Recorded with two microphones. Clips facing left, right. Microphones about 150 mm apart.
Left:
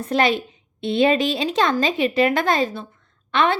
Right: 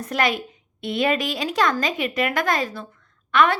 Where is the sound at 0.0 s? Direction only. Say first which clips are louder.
Left 4 dB; 25° left (ahead or behind).